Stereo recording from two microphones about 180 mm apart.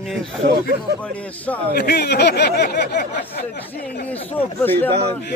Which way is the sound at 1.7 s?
65° left (ahead or behind).